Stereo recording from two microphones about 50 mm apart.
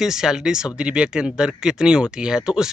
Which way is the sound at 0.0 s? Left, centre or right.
Centre.